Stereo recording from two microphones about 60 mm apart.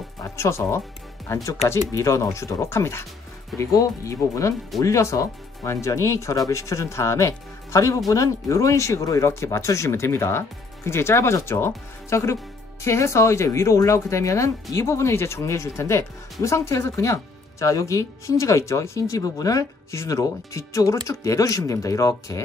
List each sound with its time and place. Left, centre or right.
0.2 s speech: left
1.2 s speech: left
3.5 s speech: left
6.5 s speech: left
19.9 s speech: left